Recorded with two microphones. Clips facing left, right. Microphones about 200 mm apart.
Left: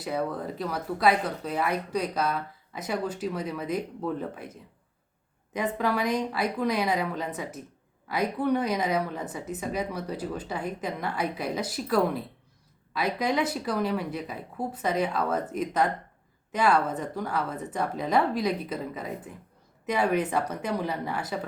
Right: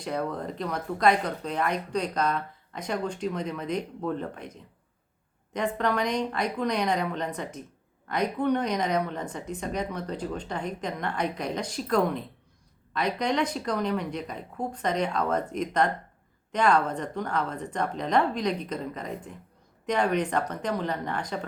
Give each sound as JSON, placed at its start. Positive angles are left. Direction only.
{"t": 0.0, "sound": "speech", "side_deg": 5}
{"t": 5.5, "sound": "a woman's voice", "side_deg": 5}